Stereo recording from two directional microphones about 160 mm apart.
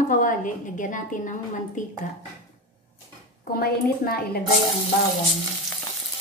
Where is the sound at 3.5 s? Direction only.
70° left (ahead or behind).